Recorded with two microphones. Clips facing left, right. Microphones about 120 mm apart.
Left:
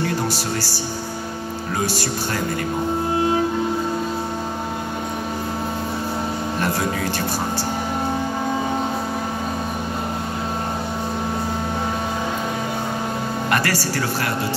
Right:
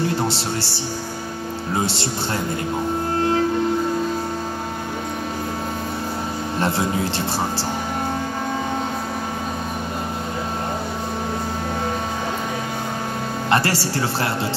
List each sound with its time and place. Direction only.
0.3 s speech: 25° right (ahead or behind)
13.5 s speech: 30° right (ahead or behind)